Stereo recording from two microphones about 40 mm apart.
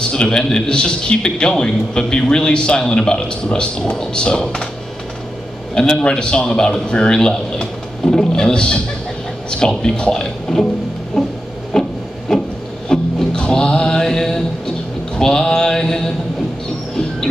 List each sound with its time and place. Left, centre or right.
0.0 s a man's voice: left
5.8 s a man's voice: left
10.5 s music: centre
11.2 s a sound: centre
11.7 s wood: centre
12.8 s music: centre
14.0 s mantra: centre